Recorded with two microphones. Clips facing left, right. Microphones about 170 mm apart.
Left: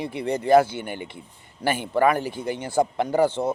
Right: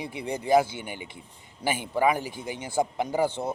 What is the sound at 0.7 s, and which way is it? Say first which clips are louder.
A man's voice: left 5 dB; 10° right (ahead or behind).